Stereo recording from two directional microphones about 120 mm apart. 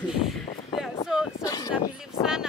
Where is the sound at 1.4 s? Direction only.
30° left (ahead or behind).